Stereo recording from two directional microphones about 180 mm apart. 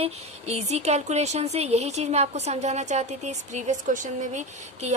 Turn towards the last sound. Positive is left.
turn(degrees=-40)  # may be behind; listen again after turning